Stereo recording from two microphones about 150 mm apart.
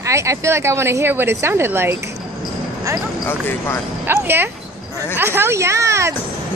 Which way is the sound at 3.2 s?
15° left (ahead or behind).